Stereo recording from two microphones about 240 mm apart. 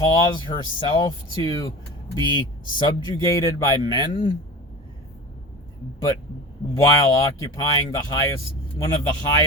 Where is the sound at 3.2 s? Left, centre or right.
Centre.